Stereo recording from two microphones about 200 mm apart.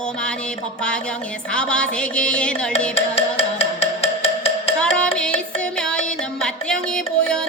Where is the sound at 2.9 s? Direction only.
30° left (ahead or behind).